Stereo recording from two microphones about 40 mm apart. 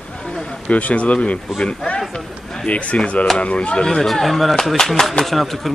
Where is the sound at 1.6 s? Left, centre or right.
Centre.